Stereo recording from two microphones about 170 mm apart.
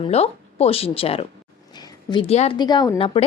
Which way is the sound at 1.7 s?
25° left (ahead or behind).